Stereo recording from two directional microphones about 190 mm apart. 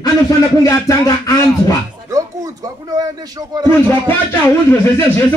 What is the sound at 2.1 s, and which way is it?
Speech, 15° right (ahead or behind).